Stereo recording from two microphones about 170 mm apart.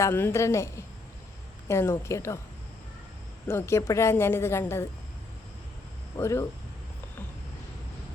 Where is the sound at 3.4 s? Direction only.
15° left (ahead or behind).